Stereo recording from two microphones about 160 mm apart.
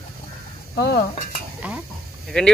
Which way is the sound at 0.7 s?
75° left (ahead or behind).